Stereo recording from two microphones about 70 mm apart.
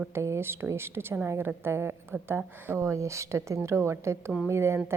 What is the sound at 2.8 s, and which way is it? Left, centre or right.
A woman's voice, right.